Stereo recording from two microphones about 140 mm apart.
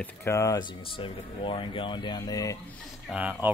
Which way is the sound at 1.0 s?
40° left (ahead or behind).